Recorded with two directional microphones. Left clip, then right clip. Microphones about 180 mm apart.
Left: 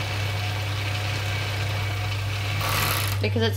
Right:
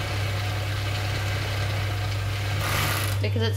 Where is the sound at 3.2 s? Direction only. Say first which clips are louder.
Left 3 dB; 40° left (ahead or behind).